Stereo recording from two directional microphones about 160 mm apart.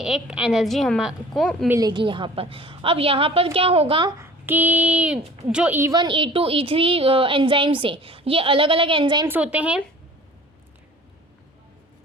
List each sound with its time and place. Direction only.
0.0 s a woman's voice: 5° right (ahead or behind)
1.6 s a woman's voice: 20° right (ahead or behind)
1.9 s speech: 30° right (ahead or behind)
4.2 s a woman's voice: 10° right (ahead or behind)
5.9 s speech: 30° right (ahead or behind)
9.2 s a woman's voice: 10° right (ahead or behind)